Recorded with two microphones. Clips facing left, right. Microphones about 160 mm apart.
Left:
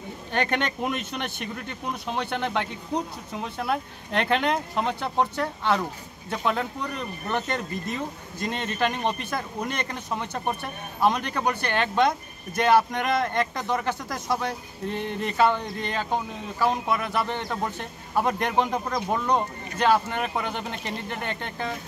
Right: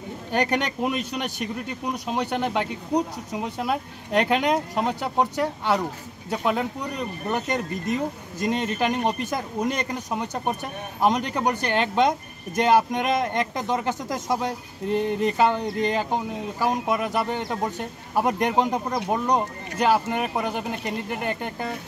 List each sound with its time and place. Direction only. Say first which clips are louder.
0.3 s speech: right 2 dB; 10° right (ahead or behind)